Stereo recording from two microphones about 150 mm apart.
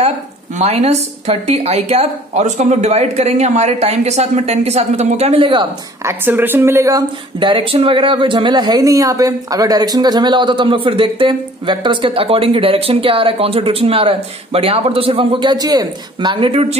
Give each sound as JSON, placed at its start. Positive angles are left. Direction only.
{"t": 0.6, "sound": "speech", "side_deg": -45}
{"t": 6.0, "sound": "a woman's voice", "side_deg": -15}
{"t": 7.3, "sound": "speech", "side_deg": -35}